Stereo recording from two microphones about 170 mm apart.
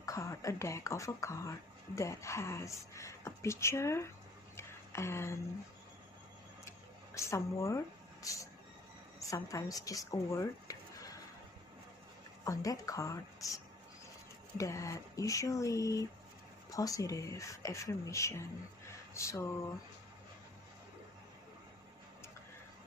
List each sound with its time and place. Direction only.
0.0 s speech: 20° left (ahead or behind)
4.6 s a sound: 15° left (ahead or behind)
7.2 s speech: 15° left (ahead or behind)
12.4 s speech: 20° left (ahead or behind)
14.6 s speech: 20° left (ahead or behind)
19.1 s a sound: 15° left (ahead or behind)